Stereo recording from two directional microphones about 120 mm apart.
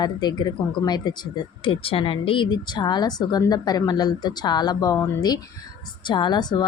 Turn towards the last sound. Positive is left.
turn(degrees=35)  # may be behind; listen again after turning